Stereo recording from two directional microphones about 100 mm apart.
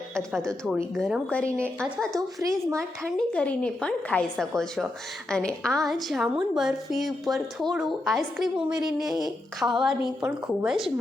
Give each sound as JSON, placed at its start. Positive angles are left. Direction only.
{"t": 0.2, "sound": "a woman's voice", "side_deg": 5}
{"t": 1.3, "sound": "a woman's voice", "side_deg": 15}
{"t": 2.4, "sound": "speech", "side_deg": -30}
{"t": 3.2, "sound": "a woman's voice", "side_deg": 10}